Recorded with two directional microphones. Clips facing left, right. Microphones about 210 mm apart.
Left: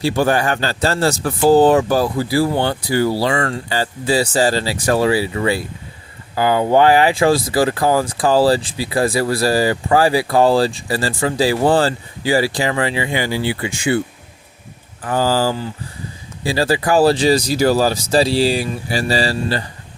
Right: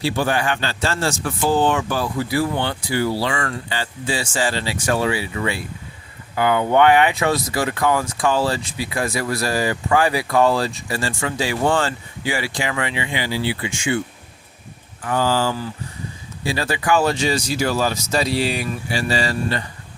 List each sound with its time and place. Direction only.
0.0 s speech: 45° left (ahead or behind)
15.0 s speech: 35° left (ahead or behind)